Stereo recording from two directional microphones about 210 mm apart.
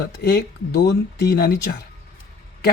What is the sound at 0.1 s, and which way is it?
Speech, 50° left (ahead or behind).